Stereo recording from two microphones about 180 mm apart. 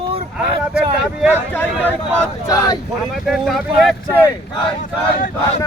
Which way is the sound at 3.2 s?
Centre (ahead or behind).